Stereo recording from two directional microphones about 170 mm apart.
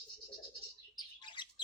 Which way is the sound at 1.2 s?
25° left (ahead or behind).